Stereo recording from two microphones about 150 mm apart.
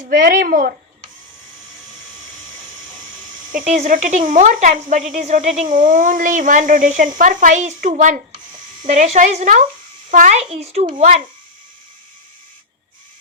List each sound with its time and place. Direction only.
0.1 s speech: 70° right (ahead or behind)
3.5 s a woman's voice: 60° right (ahead or behind)